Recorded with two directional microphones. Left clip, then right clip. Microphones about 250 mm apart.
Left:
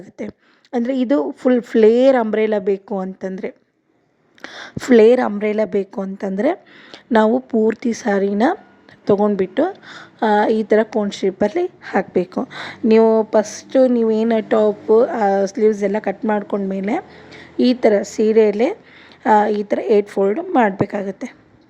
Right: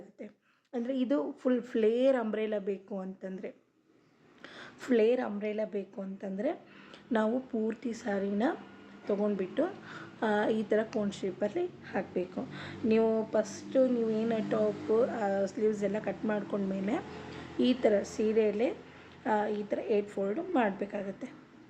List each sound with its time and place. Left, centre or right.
0.7 s a woman's voice: left